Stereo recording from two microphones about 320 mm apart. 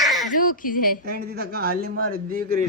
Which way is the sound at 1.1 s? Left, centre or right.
Right.